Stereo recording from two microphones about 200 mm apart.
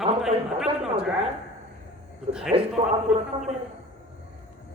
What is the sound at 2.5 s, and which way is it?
Speech, 25° right (ahead or behind).